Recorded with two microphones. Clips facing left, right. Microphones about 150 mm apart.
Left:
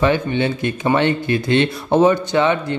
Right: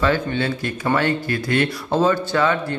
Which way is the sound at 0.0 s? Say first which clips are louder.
Left 3 dB; 20° left (ahead or behind).